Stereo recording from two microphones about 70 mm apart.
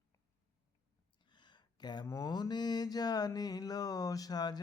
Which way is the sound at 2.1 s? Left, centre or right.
Left.